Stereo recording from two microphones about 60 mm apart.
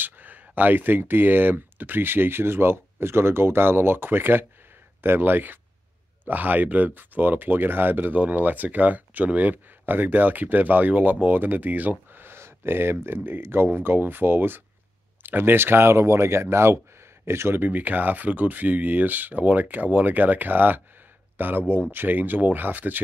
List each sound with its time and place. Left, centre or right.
0.0 s speech: right
17.6 s speech: right